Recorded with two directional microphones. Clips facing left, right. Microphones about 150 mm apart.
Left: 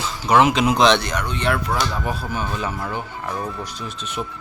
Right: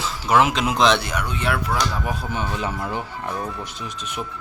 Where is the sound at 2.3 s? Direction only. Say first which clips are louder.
Even; 25° right (ahead or behind).